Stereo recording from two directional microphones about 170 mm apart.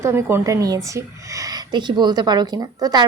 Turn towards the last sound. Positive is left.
turn(degrees=-20)  # may be behind; listen again after turning